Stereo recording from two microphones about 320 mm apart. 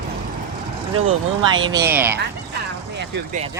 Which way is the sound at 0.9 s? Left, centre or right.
Right.